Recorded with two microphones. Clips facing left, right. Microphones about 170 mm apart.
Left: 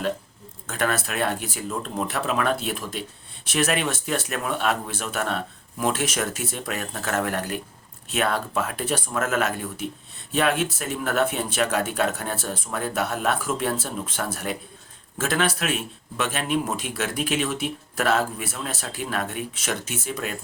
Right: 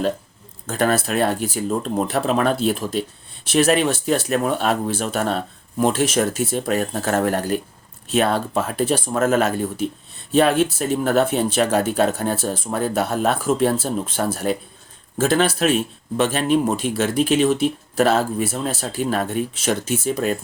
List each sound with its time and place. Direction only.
0.7 s speech: 30° right (ahead or behind)